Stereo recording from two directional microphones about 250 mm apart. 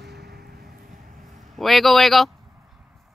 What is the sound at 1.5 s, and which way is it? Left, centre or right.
Speech, centre.